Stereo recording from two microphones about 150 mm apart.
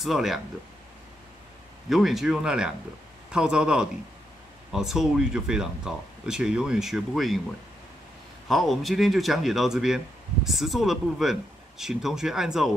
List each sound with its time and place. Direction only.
0.0 s speech: centre (ahead or behind)
1.9 s speech: centre (ahead or behind)
8.5 s speech: centre (ahead or behind)